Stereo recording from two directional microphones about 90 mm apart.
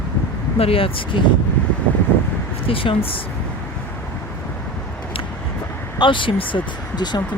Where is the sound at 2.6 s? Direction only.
85° left.